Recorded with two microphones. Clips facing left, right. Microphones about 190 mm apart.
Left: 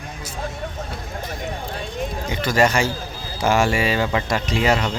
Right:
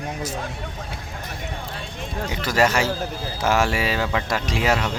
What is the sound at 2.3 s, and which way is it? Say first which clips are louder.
Speech: left 2 dB; 5° right (ahead or behind).